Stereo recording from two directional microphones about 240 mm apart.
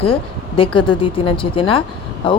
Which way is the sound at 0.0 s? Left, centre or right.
Left.